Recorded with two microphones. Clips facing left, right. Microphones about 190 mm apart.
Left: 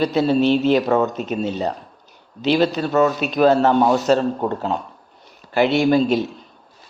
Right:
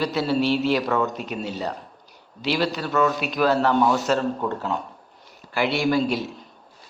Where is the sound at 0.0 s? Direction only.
20° left (ahead or behind).